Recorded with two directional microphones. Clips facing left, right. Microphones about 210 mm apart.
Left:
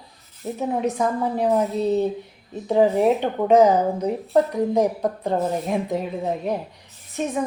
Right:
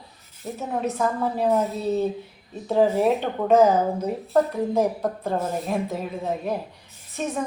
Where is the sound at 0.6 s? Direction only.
15° left (ahead or behind).